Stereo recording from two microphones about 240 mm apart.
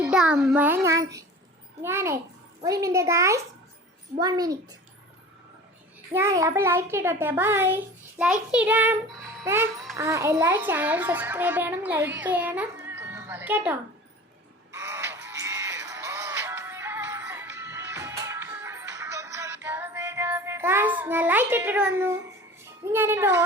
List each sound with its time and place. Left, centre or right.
0.0 s a child's voice: centre
6.1 s a child's voice: centre
14.7 s music: centre
22.6 s speech: centre